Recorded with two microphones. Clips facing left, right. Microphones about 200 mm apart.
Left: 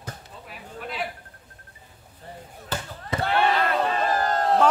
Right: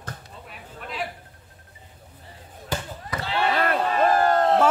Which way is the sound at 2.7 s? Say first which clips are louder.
Right 2 dB; 10° right (ahead or behind).